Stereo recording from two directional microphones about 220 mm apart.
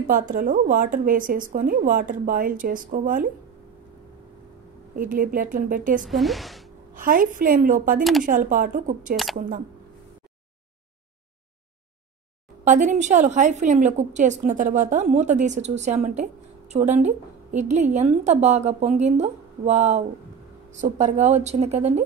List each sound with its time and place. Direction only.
0.0 s a woman's voice: 35° right (ahead or behind)
4.9 s a woman's voice: 40° right (ahead or behind)
6.0 s a woman's voice: centre (ahead or behind)
6.9 s a woman's voice: 40° right (ahead or behind)
9.1 s a sound: centre (ahead or behind)
12.6 s a woman's voice: 35° right (ahead or behind)